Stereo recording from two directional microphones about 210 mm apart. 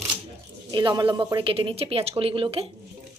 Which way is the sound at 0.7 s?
20° right (ahead or behind).